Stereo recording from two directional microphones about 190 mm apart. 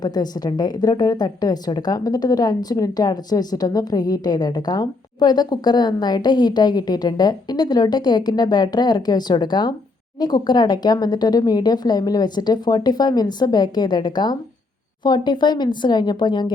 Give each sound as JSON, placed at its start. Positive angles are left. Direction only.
{"t": 0.0, "sound": "a woman's voice", "side_deg": 20}